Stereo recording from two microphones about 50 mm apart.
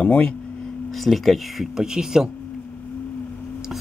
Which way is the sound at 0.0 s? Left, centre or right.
Centre.